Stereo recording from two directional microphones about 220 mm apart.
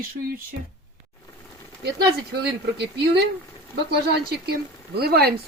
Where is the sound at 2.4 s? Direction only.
50° right (ahead or behind).